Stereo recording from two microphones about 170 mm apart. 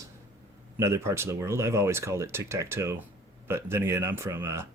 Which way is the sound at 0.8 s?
15° right (ahead or behind).